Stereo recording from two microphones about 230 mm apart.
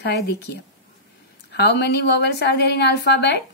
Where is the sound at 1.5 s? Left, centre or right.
Left.